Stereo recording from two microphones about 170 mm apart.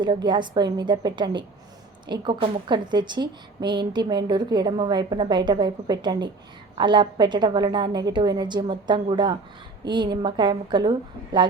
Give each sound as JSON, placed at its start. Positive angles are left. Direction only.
{"t": 0.0, "sound": "a woman's voice", "side_deg": -25}